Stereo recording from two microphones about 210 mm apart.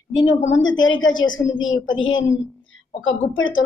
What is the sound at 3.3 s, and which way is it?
Speech, 65° left (ahead or behind).